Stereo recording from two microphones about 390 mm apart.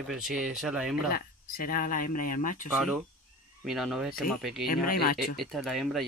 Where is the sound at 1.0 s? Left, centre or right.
Left.